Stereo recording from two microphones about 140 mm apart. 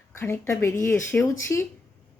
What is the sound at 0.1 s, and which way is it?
A woman's voice, 20° left (ahead or behind).